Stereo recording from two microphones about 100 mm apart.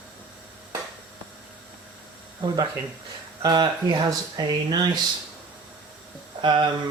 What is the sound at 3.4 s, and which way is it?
Speech, 45° right (ahead or behind).